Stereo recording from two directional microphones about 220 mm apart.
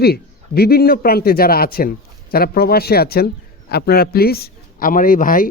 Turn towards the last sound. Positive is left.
turn(degrees=40)  # may be behind; listen again after turning